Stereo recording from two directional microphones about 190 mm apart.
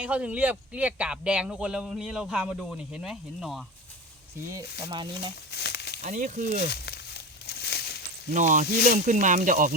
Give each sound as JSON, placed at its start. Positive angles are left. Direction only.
{"t": 0.0, "sound": "speech", "side_deg": -5}
{"t": 4.6, "sound": "rub", "side_deg": 60}
{"t": 4.9, "sound": "speech", "side_deg": -25}
{"t": 5.5, "sound": "a sound", "side_deg": 60}
{"t": 6.0, "sound": "speech", "side_deg": -40}
{"t": 6.6, "sound": "crumpling", "side_deg": 60}
{"t": 8.3, "sound": "speech", "side_deg": -40}